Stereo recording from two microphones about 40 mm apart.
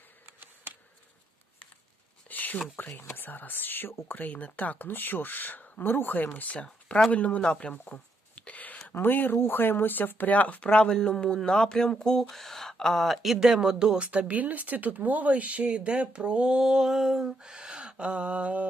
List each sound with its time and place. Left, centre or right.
2.3 s a sound: left
3.0 s speech: left
4.2 s speech: left
4.9 s speech: left
6.5 s speech: left
8.4 s a sound: left
9.0 s speech: left
9.3 s speech: left
10.9 s speech: centre
12.3 s a sound: centre
12.7 s speech: centre
14.0 s speech: right; by 17.5 s centre
17.5 s a sound: right